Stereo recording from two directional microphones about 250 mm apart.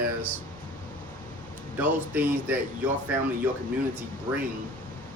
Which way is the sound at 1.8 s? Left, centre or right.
Centre.